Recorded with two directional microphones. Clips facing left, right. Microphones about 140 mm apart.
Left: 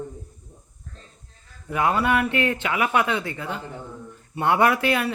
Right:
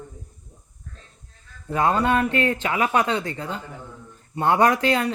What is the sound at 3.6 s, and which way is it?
Speech, 15° left (ahead or behind).